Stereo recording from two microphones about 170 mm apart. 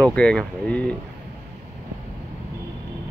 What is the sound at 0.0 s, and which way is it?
Speech, 5° left (ahead or behind).